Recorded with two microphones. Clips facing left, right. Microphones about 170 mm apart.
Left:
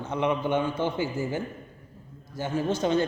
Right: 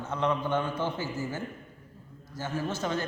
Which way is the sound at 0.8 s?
20° left (ahead or behind).